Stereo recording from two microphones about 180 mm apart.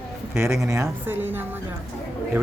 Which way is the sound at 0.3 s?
15° right (ahead or behind).